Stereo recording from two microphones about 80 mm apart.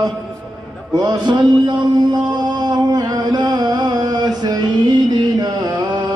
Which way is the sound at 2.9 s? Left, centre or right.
Right.